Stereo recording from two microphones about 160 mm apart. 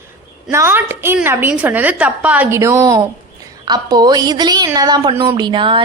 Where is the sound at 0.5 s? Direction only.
15° right (ahead or behind).